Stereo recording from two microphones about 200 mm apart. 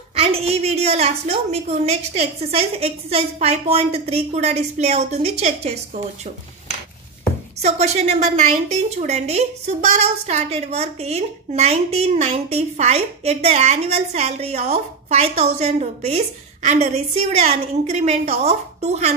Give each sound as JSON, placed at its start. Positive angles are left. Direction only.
{"t": 0.1, "sound": "a sound", "side_deg": -30}
{"t": 1.5, "sound": "a woman's voice", "side_deg": -30}
{"t": 7.6, "sound": "a woman's voice", "side_deg": -35}